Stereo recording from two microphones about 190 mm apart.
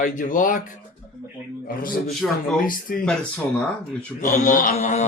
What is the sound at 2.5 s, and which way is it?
Speech, 45° left (ahead or behind).